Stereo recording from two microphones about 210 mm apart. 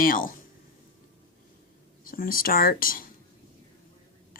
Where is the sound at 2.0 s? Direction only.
45° left (ahead or behind).